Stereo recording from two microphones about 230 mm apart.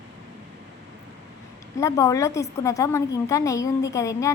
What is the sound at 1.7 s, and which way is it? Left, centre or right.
A woman's voice, centre.